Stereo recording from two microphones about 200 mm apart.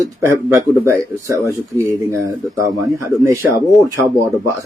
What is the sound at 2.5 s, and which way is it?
Speech, 15° right (ahead or behind).